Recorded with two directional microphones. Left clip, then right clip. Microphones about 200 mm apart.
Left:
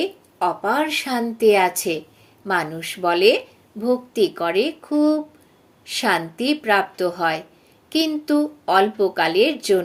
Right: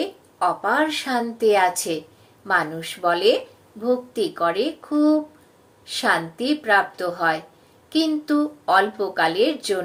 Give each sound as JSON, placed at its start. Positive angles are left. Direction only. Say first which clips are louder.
{"t": 0.0, "sound": "a woman's voice", "louder": "left 1 dB", "side_deg": 50}